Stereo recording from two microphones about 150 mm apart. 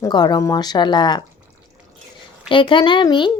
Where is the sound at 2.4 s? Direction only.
35° left (ahead or behind).